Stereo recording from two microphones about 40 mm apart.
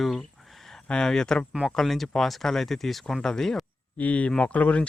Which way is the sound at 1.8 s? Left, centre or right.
Centre.